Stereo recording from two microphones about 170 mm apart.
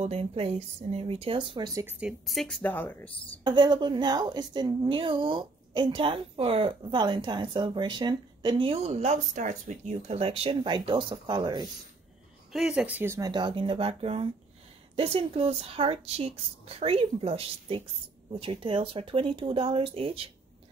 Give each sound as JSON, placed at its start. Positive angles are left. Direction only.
{"t": 0.0, "sound": "speech", "side_deg": -35}
{"t": 1.8, "sound": "speech", "side_deg": -10}
{"t": 3.4, "sound": "a woman's voice", "side_deg": -25}
{"t": 12.5, "sound": "speech", "side_deg": -5}
{"t": 13.3, "sound": "speech", "side_deg": -25}